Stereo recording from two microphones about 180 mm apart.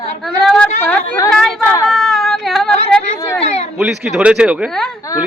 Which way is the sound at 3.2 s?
15° left (ahead or behind).